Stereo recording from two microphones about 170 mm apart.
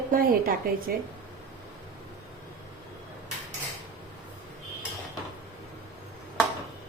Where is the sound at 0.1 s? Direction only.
55° right (ahead or behind).